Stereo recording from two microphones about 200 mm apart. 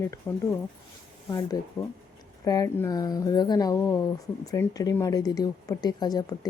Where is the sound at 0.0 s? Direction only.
15° left (ahead or behind).